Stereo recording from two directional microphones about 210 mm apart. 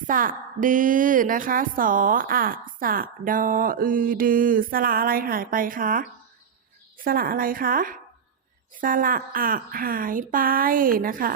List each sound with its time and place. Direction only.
0.1 s a woman's voice: 40° right (ahead or behind)